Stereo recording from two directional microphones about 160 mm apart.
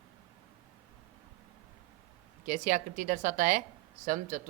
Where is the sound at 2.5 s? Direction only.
55° right (ahead or behind).